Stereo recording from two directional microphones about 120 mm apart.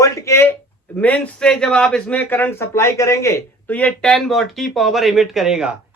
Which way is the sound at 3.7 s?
10° left (ahead or behind).